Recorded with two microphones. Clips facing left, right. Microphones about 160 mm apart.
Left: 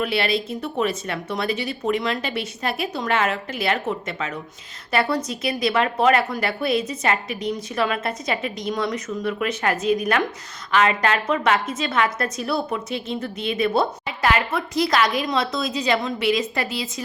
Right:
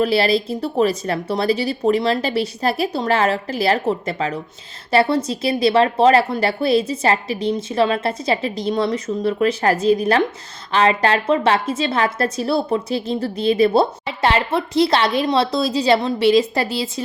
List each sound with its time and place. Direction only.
0.0 s a woman's voice: 35° right (ahead or behind)